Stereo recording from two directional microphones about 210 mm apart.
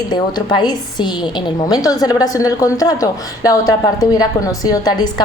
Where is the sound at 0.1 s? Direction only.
20° left (ahead or behind).